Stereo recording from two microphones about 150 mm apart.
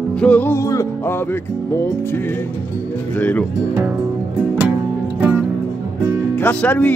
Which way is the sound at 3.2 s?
10° left (ahead or behind).